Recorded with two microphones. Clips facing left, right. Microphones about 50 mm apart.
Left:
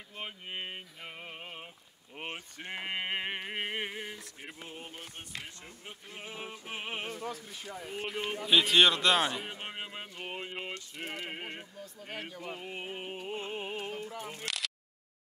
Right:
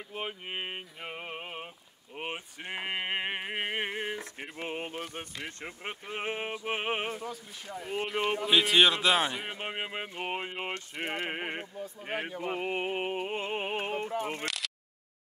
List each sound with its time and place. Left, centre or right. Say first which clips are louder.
0.1 s a sound: right 4 dB; right
4.6 s speech: right 12 dB; right
5.6 s speech: right 8 dB; right
7.2 s a man's voice: even; centre
9.5 s a sound: right 5 dB; right
10.6 s speech: right 5 dB; right
12.0 s speech: right 7 dB; right
12.5 s speech: right 9 dB; right
14.4 s a sound: right 2 dB; centre